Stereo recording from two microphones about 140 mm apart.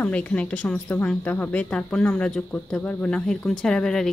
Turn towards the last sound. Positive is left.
turn(degrees=5)  # may be behind; listen again after turning